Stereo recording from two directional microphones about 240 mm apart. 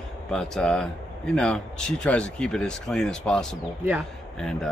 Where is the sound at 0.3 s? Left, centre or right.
Centre.